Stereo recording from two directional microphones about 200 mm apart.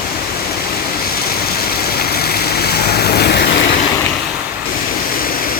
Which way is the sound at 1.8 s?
50° left (ahead or behind).